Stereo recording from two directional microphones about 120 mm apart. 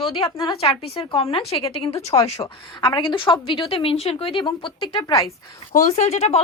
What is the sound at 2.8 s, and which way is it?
A woman's voice, 40° left (ahead or behind).